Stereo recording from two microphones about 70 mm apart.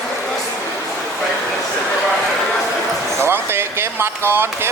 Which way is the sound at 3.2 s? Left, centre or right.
Right.